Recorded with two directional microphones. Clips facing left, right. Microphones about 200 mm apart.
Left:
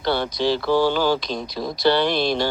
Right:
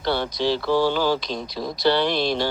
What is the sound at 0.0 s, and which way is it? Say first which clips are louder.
Speech: left 1 dB; 50° left (ahead or behind).